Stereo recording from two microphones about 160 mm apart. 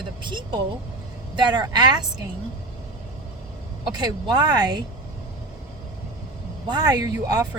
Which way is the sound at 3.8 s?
25° right (ahead or behind).